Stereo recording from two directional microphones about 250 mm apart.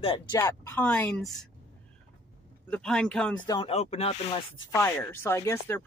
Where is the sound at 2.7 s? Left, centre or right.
Centre.